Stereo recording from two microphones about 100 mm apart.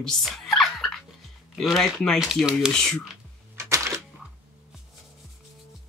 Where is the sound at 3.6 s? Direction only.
30° right (ahead or behind).